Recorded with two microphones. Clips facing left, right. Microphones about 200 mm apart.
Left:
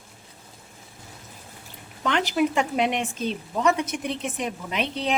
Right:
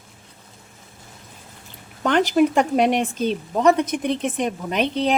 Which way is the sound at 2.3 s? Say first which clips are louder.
Right 5 dB; 45° right (ahead or behind).